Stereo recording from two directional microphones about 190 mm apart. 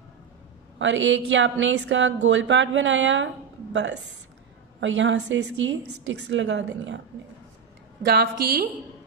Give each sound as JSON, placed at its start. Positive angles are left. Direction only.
{"t": 0.7, "sound": "speech", "side_deg": -75}
{"t": 4.7, "sound": "speech", "side_deg": -75}
{"t": 8.0, "sound": "a woman's voice", "side_deg": -55}